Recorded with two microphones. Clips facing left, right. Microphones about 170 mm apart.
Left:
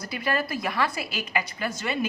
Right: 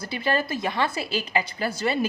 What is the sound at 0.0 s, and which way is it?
A woman's voice, 30° right (ahead or behind).